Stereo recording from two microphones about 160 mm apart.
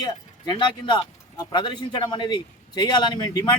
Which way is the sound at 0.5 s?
30° left (ahead or behind).